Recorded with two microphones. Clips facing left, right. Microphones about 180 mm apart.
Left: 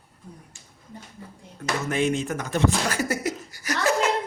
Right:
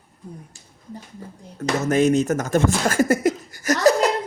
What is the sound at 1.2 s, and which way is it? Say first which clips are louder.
A man's voice: right 8 dB; 40° right (ahead or behind).